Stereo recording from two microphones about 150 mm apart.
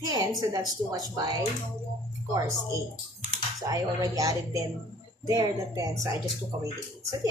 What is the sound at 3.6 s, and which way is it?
Speech, 20° right (ahead or behind).